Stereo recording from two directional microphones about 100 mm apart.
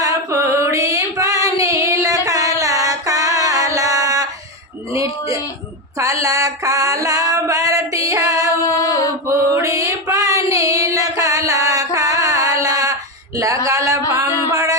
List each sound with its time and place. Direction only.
0.0 s female singing: 35° right (ahead or behind)
4.9 s a man's voice: 35° right (ahead or behind)
6.2 s a sound: 35° right (ahead or behind)
8.6 s a sound: 30° left (ahead or behind)
9.2 s female singing: 35° right (ahead or behind)
14.5 s music: 35° right (ahead or behind)